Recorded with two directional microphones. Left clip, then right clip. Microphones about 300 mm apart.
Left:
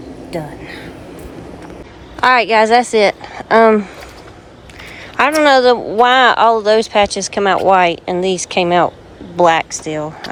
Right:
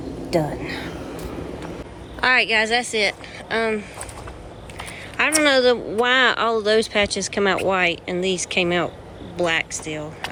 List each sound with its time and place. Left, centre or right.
0.3 s speech: centre
2.2 s speech: centre
5.1 s speech: centre